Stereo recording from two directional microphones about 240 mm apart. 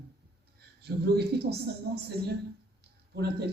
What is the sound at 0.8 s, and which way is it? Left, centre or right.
Speech, right.